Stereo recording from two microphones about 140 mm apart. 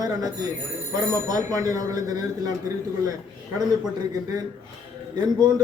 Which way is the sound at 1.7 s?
25° right (ahead or behind).